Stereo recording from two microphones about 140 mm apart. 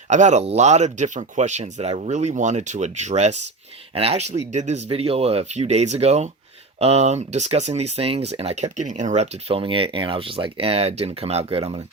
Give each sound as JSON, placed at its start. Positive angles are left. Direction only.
{"t": 0.1, "sound": "speech", "side_deg": -55}
{"t": 8.8, "sound": "speech", "side_deg": -60}